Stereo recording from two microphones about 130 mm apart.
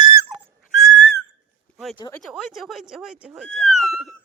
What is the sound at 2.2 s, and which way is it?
Speech, 5° right (ahead or behind).